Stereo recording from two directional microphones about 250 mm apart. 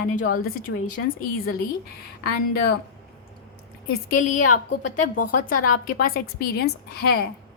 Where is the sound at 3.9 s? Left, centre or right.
Left.